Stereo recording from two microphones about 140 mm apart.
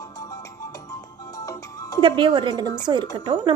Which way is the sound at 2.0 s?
35° right (ahead or behind).